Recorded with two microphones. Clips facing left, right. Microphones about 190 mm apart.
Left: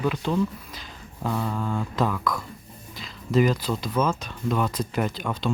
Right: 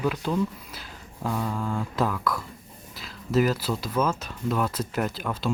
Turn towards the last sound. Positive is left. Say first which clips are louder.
# left 1 dB
turn(degrees=-5)  # may be behind; listen again after turning